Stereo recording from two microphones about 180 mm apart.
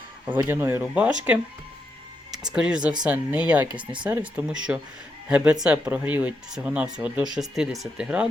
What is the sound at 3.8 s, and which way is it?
Speech, 25° right (ahead or behind).